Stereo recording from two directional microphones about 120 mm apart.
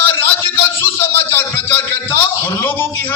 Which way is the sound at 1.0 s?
20° left (ahead or behind).